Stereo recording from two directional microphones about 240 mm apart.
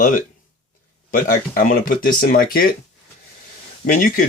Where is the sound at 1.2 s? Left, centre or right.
Left.